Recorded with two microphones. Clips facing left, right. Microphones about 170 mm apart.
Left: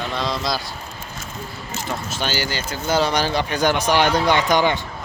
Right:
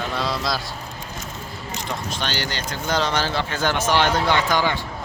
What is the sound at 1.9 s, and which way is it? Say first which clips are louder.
Speech: left 2 dB; 5° left (ahead or behind).